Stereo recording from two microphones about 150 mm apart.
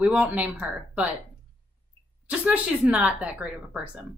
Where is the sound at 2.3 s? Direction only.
10° right (ahead or behind).